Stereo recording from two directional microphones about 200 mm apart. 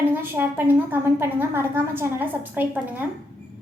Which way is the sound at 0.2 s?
10° right (ahead or behind).